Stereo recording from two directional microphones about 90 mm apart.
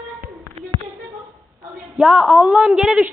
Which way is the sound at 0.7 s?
85° right.